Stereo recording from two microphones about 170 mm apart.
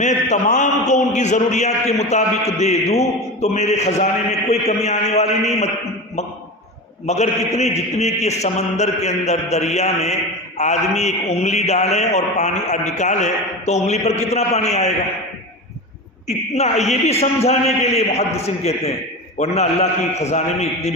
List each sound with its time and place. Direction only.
0.0 s a man's voice: 45° left (ahead or behind)
7.1 s a man's voice: 40° left (ahead or behind)
16.2 s a man's voice: 40° left (ahead or behind)